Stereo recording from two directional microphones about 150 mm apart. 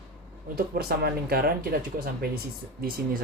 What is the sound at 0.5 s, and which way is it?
Speech, 90° right.